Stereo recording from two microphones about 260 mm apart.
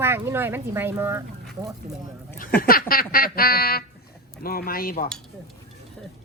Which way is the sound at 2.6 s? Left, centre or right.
Left.